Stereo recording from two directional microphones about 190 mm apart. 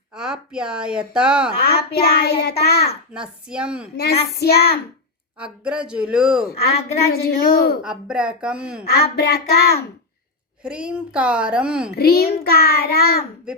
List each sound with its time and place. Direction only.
0.1 s speech: 5° right (ahead or behind)
1.6 s child singing: 55° left (ahead or behind)
3.1 s a woman's voice: 5° right (ahead or behind)
3.9 s child singing: 55° left (ahead or behind)
5.4 s a woman's voice: 5° right (ahead or behind)
7.1 s child singing: 55° left (ahead or behind)
7.8 s a woman's voice: 5° right (ahead or behind)
8.9 s child singing: 55° left (ahead or behind)
10.6 s a woman's voice: 5° right (ahead or behind)
11.9 s a child's voice: 55° left (ahead or behind)